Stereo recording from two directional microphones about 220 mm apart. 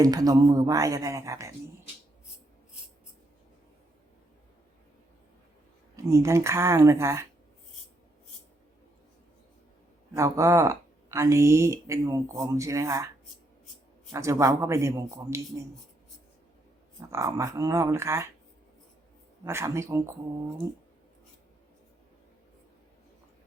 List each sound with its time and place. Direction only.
0.0 s speech: 15° right (ahead or behind)
6.0 s speech: 15° right (ahead or behind)
10.2 s speech: 15° right (ahead or behind)
14.1 s speech: 15° right (ahead or behind)
17.1 s speech: 15° right (ahead or behind)
19.5 s speech: 10° right (ahead or behind)